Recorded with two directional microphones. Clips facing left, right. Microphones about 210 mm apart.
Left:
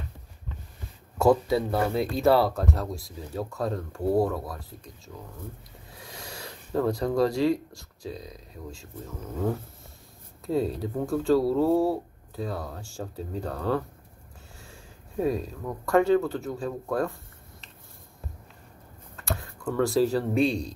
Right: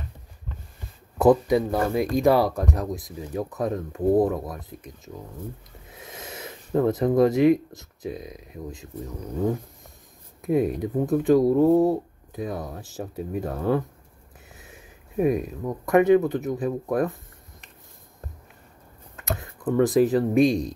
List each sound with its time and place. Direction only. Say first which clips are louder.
1.1 s speech: right 3 dB; 20° right (ahead or behind)
19.2 s a sound: right 4 dB; 20° right (ahead or behind)
20.4 s speech: right 5 dB; 15° right (ahead or behind)